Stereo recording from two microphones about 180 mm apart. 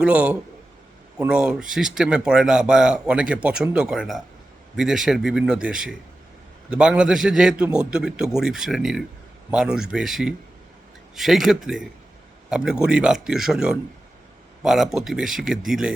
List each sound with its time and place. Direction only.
0.0 s a man's voice: 5° right (ahead or behind)